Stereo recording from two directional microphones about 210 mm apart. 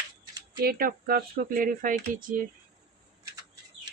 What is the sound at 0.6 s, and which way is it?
Speech, 45° right (ahead or behind).